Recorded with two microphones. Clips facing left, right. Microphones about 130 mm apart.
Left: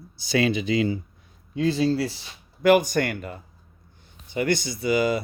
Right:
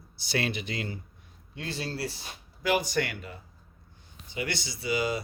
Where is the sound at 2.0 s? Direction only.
90° left.